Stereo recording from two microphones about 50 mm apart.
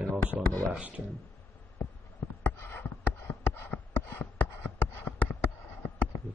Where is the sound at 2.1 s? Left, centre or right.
Left.